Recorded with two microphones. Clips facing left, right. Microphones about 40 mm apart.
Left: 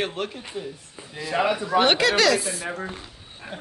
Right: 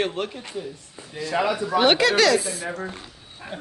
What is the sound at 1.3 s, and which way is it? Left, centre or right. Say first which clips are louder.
Speech: left 1 dB; centre.